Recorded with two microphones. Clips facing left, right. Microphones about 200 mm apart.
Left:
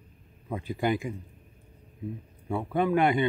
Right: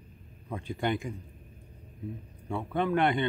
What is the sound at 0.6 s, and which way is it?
Speech, 5° left (ahead or behind).